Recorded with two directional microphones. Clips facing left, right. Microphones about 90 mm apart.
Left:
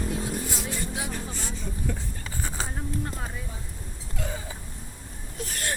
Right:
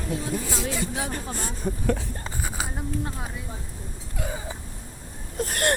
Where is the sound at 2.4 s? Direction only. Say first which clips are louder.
Right 1 dB; 10° right (ahead or behind).